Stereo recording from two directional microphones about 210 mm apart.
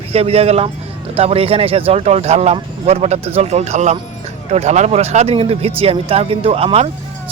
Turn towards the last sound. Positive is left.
turn(degrees=-30)  # may be behind; listen again after turning